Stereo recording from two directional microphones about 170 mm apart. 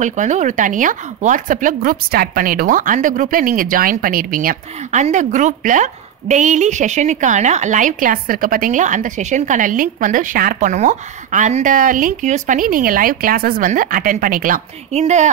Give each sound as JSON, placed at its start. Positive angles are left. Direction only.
{"t": 0.0, "sound": "a woman's voice", "side_deg": -45}